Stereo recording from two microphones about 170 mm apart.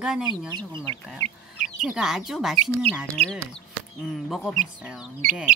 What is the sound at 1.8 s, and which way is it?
Speech, 5° right (ahead or behind).